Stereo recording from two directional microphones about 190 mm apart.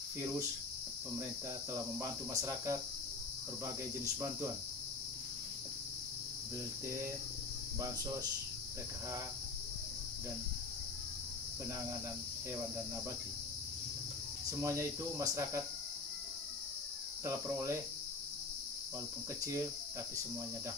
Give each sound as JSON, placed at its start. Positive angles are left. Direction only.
{"t": 1.7, "sound": "cricket", "side_deg": -15}
{"t": 3.6, "sound": "speech", "side_deg": -20}
{"t": 14.6, "sound": "cricket", "side_deg": -15}
{"t": 17.2, "sound": "cricket", "side_deg": -15}